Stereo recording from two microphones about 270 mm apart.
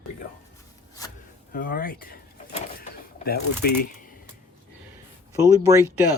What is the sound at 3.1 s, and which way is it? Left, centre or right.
Speech, left.